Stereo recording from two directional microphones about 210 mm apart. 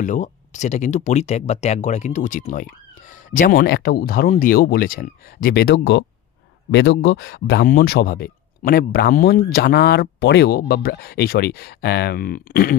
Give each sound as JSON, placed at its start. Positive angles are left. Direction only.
{"t": 0.0, "sound": "speech", "side_deg": 35}